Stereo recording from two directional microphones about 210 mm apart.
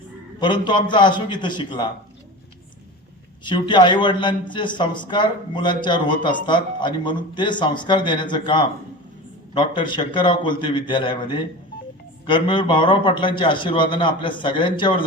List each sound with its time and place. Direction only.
0.3 s a man's voice: 20° left (ahead or behind)
3.4 s a man's voice: 20° left (ahead or behind)